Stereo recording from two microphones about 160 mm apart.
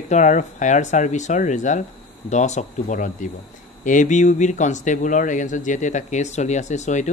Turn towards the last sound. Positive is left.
turn(degrees=50)  # may be behind; listen again after turning